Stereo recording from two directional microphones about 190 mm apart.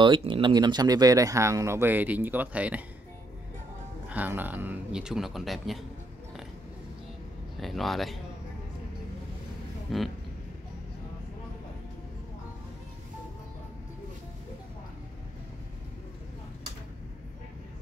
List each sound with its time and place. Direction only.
0.0 s speech: 25° right (ahead or behind); by 2.8 s 5° right (ahead or behind)
4.1 s speech: 10° right (ahead or behind)
7.6 s speech: centre (ahead or behind)
9.9 s speech: centre (ahead or behind)